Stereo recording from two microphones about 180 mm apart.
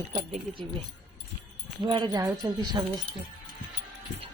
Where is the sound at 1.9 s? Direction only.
25° right (ahead or behind).